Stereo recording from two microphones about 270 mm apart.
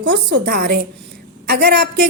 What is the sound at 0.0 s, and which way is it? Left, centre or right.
A woman's voice, right.